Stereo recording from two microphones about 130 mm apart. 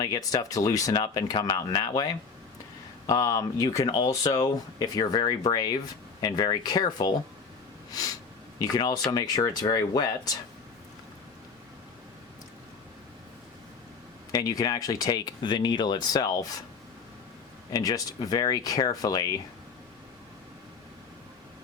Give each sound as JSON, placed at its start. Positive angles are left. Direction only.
{"t": 0.0, "sound": "speech", "side_deg": 30}
{"t": 3.1, "sound": "speech", "side_deg": 25}
{"t": 14.3, "sound": "speech", "side_deg": 30}
{"t": 17.7, "sound": "speech", "side_deg": 30}